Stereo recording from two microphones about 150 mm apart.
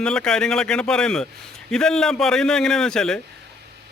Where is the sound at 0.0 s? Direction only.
5° left (ahead or behind).